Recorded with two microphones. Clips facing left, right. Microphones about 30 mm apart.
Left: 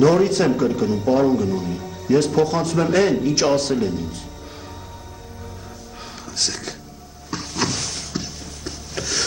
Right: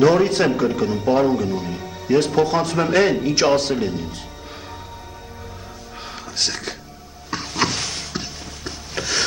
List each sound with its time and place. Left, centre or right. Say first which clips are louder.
0.0 s speech: even; centre
6.3 s speech: right 1 dB; centre
7.2 s a sound: right 2 dB; right